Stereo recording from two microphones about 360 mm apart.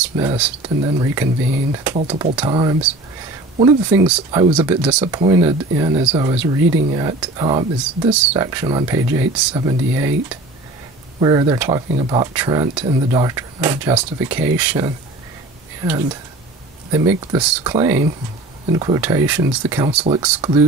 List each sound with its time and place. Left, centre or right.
0.0 s speech: centre
11.1 s speech: centre
17.2 s speech: centre